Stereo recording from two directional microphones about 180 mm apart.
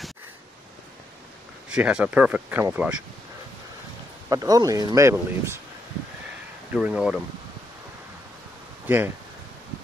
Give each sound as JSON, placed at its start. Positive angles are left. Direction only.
{"t": 1.7, "sound": "speech", "side_deg": -5}
{"t": 4.3, "sound": "speech", "side_deg": -20}
{"t": 6.7, "sound": "speech", "side_deg": -5}
{"t": 8.8, "sound": "speech", "side_deg": -10}